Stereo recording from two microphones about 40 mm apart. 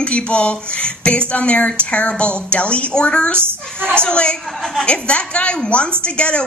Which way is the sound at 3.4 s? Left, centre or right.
Right.